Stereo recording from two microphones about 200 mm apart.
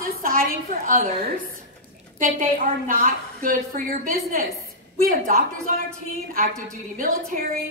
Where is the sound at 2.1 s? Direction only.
40° right (ahead or behind).